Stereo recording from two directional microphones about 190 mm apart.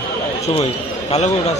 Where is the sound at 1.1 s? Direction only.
35° left (ahead or behind).